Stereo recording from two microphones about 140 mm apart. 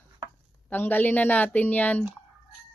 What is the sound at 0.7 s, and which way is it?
A woman's voice, 10° left (ahead or behind).